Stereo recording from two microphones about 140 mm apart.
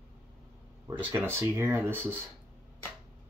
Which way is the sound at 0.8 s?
15° right (ahead or behind).